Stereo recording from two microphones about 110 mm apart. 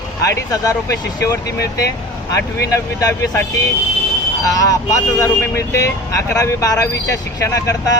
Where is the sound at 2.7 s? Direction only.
30° left (ahead or behind).